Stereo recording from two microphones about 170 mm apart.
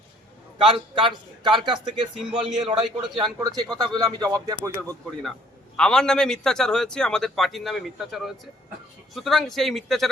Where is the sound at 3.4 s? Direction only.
20° right (ahead or behind).